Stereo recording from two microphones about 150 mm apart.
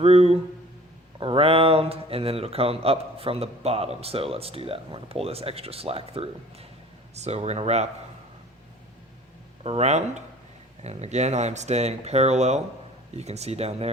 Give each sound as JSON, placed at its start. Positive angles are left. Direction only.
{"t": 0.0, "sound": "a man's voice", "side_deg": -45}
{"t": 9.6, "sound": "speech", "side_deg": -45}